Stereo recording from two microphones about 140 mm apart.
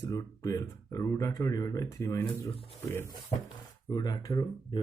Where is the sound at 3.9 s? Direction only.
25° left (ahead or behind).